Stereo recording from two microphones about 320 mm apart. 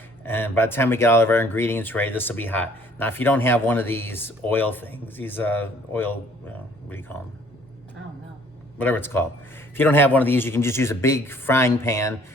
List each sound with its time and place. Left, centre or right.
0.3 s speech: centre
8.8 s speech: centre